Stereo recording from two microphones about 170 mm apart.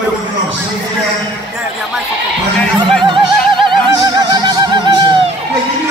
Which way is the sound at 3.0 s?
30° right (ahead or behind).